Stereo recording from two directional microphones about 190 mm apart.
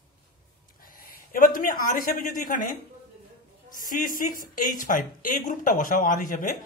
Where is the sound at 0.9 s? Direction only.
45° left (ahead or behind).